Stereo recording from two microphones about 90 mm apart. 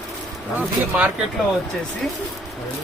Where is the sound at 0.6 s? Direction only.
20° right (ahead or behind).